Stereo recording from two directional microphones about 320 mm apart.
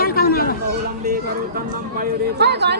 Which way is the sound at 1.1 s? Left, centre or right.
Right.